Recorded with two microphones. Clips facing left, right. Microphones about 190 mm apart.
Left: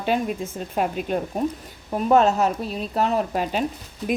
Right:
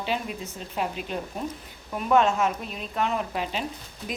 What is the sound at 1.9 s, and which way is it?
A woman's voice, 35° left (ahead or behind).